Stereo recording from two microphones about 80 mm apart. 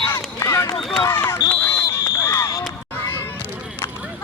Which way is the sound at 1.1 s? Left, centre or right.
Left.